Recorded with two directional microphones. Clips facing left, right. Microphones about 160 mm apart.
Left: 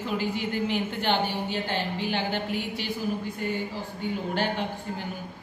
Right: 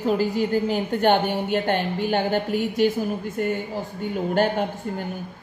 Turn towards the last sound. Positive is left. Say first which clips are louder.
# right 7 dB
turn(degrees=-45)  # may be behind; listen again after turning